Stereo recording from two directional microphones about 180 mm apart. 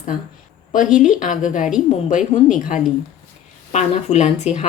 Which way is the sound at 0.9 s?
45° left (ahead or behind).